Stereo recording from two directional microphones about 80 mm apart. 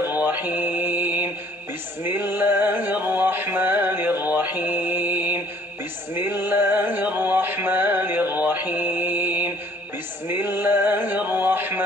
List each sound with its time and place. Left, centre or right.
0.0 s mantra: right
2.0 s music: right
10.2 s male singing: right